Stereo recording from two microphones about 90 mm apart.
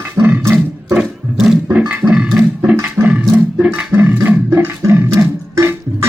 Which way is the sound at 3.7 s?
20° right (ahead or behind).